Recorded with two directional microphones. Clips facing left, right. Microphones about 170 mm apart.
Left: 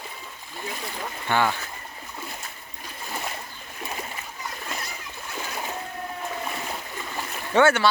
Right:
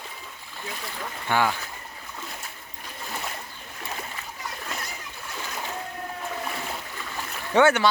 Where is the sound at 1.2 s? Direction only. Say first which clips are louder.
Even; 10° right (ahead or behind).